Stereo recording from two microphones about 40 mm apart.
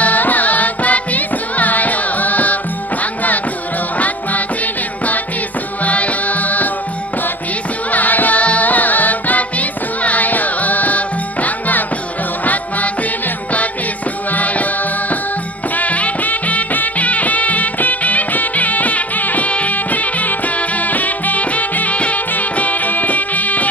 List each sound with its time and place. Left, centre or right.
0.0 s music: left
5.9 s music: left
7.9 s music: left
14.3 s music: left